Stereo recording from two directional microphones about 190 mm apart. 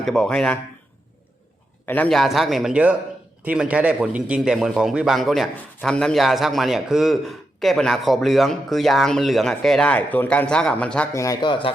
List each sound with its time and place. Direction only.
0.0 s a man's voice: 5° left (ahead or behind)
1.9 s a man's voice: 5° left (ahead or behind)
11.1 s speech: 15° left (ahead or behind)